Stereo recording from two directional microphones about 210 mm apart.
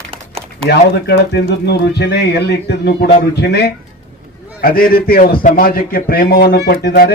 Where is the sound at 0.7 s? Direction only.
55° left (ahead or behind).